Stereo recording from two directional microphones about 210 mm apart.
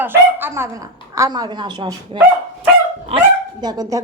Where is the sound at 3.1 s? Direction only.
30° right (ahead or behind).